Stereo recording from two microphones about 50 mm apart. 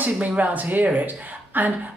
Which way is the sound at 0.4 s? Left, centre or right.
Right.